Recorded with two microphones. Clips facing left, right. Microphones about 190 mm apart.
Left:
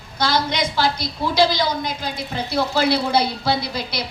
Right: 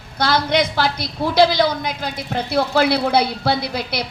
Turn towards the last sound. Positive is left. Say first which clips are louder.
# right 2 dB
turn(degrees=-60)  # may be behind; listen again after turning